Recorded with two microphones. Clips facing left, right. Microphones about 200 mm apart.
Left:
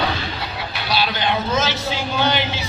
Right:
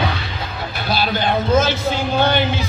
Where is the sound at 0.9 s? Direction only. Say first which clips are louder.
Right 2 dB; 50° right (ahead or behind).